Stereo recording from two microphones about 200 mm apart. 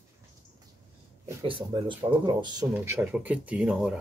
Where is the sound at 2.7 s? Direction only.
10° right (ahead or behind).